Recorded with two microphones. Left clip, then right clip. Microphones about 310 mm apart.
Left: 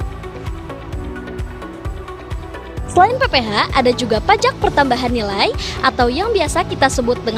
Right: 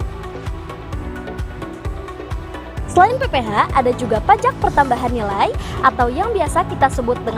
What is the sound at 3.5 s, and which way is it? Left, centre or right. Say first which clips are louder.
Speech: left 1 dB; left.